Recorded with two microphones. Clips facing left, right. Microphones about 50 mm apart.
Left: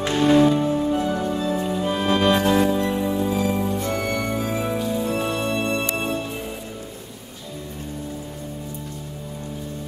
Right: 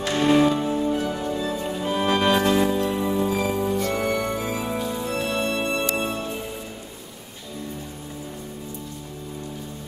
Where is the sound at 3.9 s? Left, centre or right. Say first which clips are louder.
Even; centre.